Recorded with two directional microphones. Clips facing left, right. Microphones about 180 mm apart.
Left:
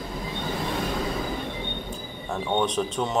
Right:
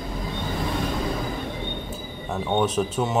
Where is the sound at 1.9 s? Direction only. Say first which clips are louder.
Right 1 dB; 5° right (ahead or behind).